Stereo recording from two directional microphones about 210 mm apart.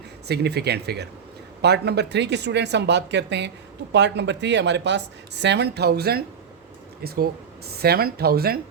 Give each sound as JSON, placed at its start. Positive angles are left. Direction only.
{"t": 0.3, "sound": "speech", "side_deg": -50}